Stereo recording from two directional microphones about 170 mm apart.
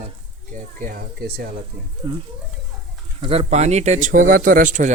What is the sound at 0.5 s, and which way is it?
Speech, 55° right (ahead or behind).